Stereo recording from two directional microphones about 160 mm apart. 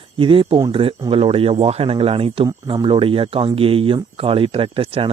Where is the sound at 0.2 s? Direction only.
30° right (ahead or behind).